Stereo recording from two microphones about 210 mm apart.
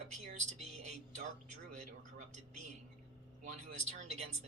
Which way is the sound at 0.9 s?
35° right (ahead or behind).